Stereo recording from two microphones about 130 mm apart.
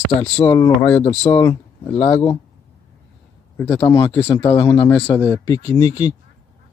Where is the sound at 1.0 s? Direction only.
55° left (ahead or behind).